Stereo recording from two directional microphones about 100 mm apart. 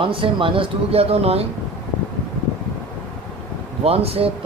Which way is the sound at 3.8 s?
85° right.